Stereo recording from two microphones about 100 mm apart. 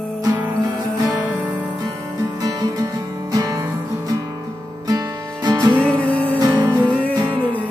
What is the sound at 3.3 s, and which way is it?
Music, 35° right (ahead or behind).